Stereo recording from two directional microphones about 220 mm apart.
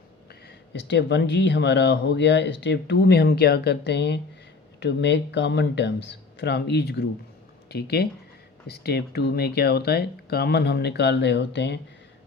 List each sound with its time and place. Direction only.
0.4 s speech: 50° left (ahead or behind)